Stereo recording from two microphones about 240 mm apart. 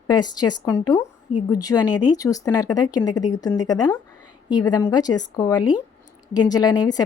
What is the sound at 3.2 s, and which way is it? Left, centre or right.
Speech, left.